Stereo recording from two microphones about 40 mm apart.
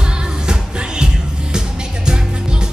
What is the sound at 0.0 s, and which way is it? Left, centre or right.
Music, right.